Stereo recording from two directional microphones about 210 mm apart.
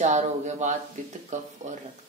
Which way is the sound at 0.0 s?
35° right (ahead or behind).